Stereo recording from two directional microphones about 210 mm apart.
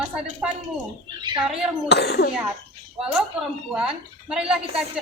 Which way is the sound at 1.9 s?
50° left (ahead or behind).